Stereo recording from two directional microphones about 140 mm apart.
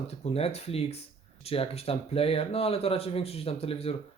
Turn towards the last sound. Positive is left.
turn(degrees=45)  # may be behind; listen again after turning